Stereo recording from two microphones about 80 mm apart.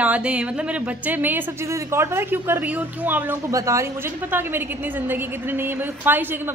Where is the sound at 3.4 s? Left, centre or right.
Right.